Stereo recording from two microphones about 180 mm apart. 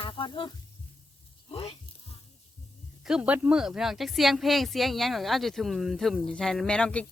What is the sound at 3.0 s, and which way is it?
Speech, 5° right (ahead or behind).